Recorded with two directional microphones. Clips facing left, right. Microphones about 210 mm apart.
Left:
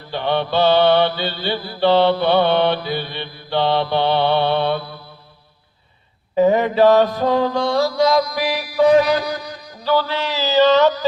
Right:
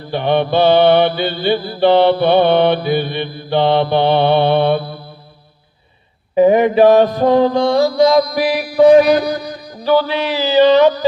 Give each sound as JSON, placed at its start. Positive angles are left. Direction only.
{"t": 0.1, "sound": "mantra", "side_deg": -15}
{"t": 6.3, "sound": "mantra", "side_deg": -15}
{"t": 9.2, "sound": "music", "side_deg": -35}
{"t": 9.8, "sound": "mantra", "side_deg": -15}